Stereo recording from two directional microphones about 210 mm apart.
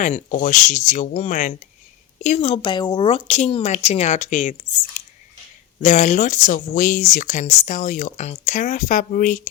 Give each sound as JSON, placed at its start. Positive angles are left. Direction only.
{"t": 0.0, "sound": "speech", "side_deg": 40}
{"t": 5.8, "sound": "speech", "side_deg": 35}